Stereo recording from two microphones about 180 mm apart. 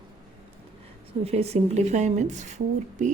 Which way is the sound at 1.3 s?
35° right (ahead or behind).